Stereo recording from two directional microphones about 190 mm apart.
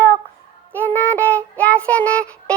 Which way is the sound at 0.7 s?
10° left (ahead or behind).